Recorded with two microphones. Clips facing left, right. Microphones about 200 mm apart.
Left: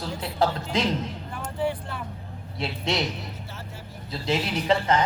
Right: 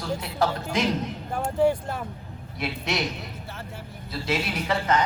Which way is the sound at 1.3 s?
45° right (ahead or behind).